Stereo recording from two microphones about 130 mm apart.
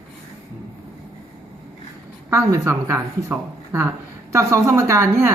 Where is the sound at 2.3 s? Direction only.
20° right (ahead or behind).